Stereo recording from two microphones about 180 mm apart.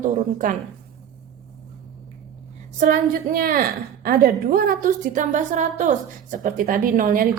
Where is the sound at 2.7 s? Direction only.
45° right (ahead or behind).